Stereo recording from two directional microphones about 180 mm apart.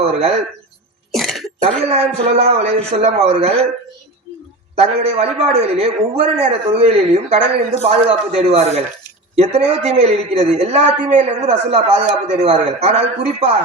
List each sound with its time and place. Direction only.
0.0 s speech: 35° right (ahead or behind)
1.1 s cough: centre (ahead or behind)
1.6 s a man's voice: 35° right (ahead or behind)
4.7 s a man's voice: 35° right (ahead or behind)